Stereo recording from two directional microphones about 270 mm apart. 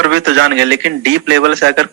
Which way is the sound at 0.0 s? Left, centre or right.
Right.